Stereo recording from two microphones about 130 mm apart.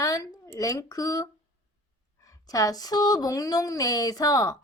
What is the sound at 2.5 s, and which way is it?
Speech, 30° left (ahead or behind).